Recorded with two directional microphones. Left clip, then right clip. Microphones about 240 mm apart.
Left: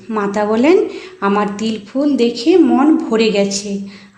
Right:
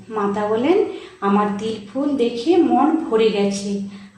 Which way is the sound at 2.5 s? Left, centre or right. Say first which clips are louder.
Left 5 dB; left.